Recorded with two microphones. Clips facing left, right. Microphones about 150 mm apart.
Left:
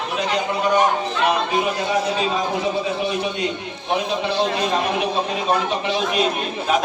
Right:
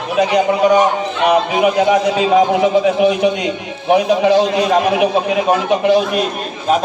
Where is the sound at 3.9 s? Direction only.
60° right (ahead or behind).